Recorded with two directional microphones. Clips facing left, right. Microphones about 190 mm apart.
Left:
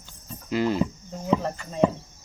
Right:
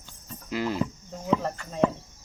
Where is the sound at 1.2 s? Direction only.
10° left (ahead or behind).